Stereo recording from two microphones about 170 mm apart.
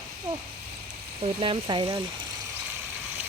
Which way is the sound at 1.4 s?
30° right (ahead or behind).